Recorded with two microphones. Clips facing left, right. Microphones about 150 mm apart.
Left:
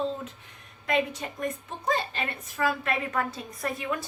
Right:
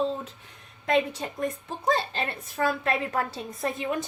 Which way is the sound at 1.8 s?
30° right (ahead or behind).